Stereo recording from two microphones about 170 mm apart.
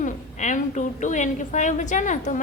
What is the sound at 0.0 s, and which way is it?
A woman's voice, 45° left (ahead or behind).